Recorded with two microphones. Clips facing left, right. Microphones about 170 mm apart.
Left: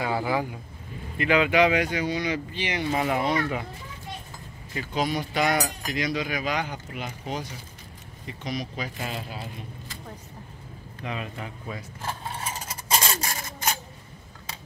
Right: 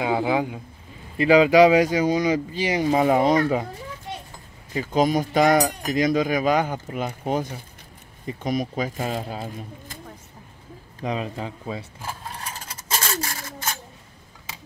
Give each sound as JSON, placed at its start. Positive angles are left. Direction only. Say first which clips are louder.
{"t": 0.0, "sound": "speech", "louder": "right 4 dB", "side_deg": -20}
{"t": 1.2, "sound": "speech", "louder": "right 7 dB", "side_deg": -35}
{"t": 4.7, "sound": "cutlery", "louder": "right 7 dB", "side_deg": -45}
{"t": 11.0, "sound": "speech", "louder": "right 6 dB", "side_deg": -35}
{"t": 12.4, "sound": "a sound", "louder": "left 2 dB", "side_deg": 10}